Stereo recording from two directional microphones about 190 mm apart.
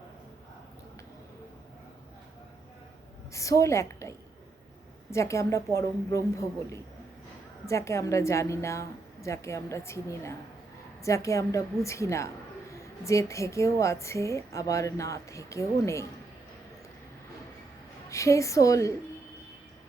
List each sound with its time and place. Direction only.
3.3 s a woman's voice: 15° left (ahead or behind)
5.1 s a woman's voice: 15° left (ahead or behind)
18.1 s a woman's voice: 15° left (ahead or behind)